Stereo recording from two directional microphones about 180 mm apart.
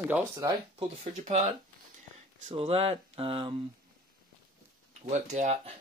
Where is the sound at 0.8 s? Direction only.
35° right (ahead or behind).